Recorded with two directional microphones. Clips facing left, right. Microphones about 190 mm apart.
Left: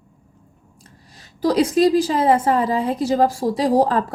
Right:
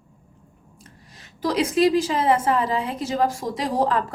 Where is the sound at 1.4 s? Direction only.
35° left (ahead or behind).